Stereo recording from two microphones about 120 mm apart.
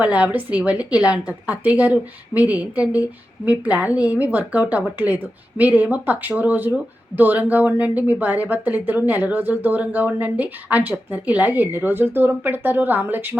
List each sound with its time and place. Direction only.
0.0 s speech: 10° right (ahead or behind)